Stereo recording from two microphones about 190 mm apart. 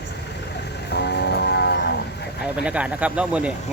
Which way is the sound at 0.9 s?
60° left (ahead or behind).